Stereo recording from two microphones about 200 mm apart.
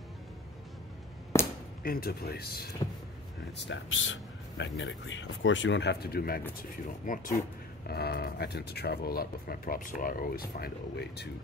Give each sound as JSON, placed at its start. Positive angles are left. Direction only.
{"t": 1.3, "sound": "a sound", "side_deg": 15}
{"t": 1.8, "sound": "speech", "side_deg": 50}
{"t": 3.5, "sound": "speech", "side_deg": 65}
{"t": 7.9, "sound": "speech", "side_deg": 50}